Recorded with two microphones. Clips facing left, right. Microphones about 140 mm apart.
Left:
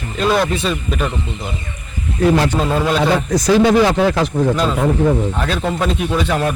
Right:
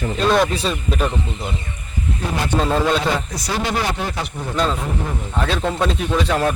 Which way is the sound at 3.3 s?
90° left.